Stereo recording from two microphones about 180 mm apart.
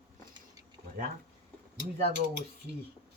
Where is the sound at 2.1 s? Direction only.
70° right (ahead or behind).